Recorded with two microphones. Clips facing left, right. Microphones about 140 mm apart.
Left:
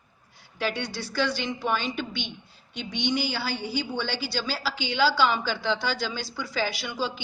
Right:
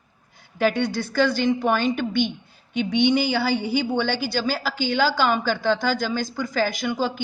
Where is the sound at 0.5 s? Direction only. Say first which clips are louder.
Right 8 dB; 50° right (ahead or behind).